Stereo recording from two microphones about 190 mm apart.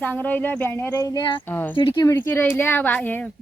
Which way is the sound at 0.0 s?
10° left (ahead or behind).